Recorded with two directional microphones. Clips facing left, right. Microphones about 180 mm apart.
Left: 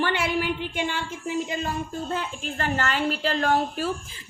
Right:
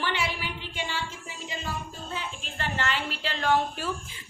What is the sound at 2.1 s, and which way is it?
A woman's voice, 45° left (ahead or behind).